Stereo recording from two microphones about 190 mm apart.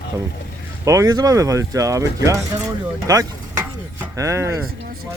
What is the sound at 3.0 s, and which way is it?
Vehicle, 20° right (ahead or behind).